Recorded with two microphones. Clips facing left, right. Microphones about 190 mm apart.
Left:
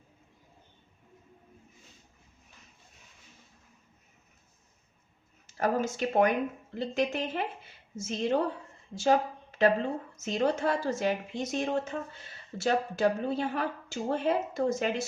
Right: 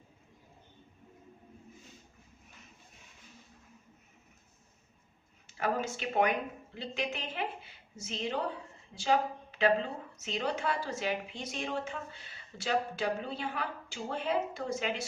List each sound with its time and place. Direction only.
5.5 s a woman's voice: 45° left (ahead or behind)